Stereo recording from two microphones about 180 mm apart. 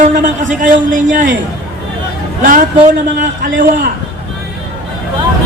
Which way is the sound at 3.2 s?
50° right (ahead or behind).